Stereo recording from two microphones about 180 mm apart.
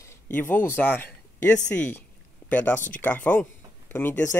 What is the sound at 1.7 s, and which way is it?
Speech, 10° left (ahead or behind).